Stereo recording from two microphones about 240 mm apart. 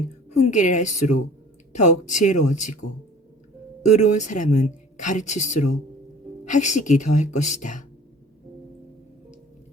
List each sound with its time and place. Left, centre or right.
0.5 s a woman's voice: left